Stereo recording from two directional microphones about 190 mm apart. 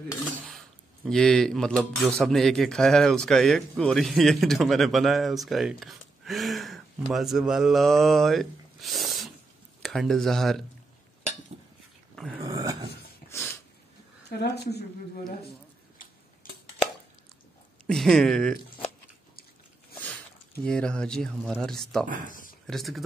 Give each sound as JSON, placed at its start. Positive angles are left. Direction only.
{"t": 0.5, "sound": "speech", "side_deg": 0}
{"t": 12.4, "sound": "dog", "side_deg": -20}
{"t": 14.3, "sound": "speech", "side_deg": 60}
{"t": 17.8, "sound": "speech", "side_deg": 5}
{"t": 20.6, "sound": "speech", "side_deg": 5}
{"t": 22.2, "sound": "speech", "side_deg": 45}
{"t": 22.7, "sound": "speech", "side_deg": 0}